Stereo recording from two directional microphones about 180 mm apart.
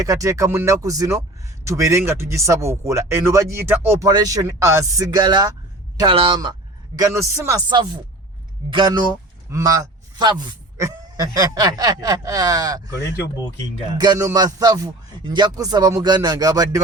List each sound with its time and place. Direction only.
0.0 s a man's voice: 20° right (ahead or behind)